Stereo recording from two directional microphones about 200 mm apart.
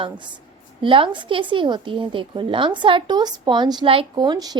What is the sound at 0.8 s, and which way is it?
A woman's voice, 25° right (ahead or behind).